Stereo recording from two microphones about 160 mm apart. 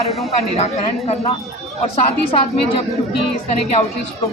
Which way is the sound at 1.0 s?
40° left (ahead or behind).